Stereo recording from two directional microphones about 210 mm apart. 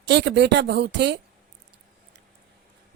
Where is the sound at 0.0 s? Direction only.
55° right (ahead or behind).